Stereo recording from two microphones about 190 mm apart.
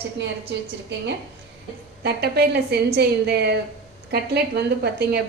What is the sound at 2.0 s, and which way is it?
A woman's voice, 60° right (ahead or behind).